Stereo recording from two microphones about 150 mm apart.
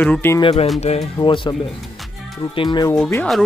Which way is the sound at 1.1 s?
35° left (ahead or behind).